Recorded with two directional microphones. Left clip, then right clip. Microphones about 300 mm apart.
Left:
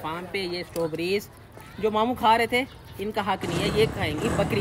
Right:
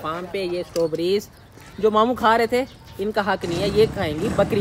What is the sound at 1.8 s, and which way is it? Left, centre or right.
Speech, centre.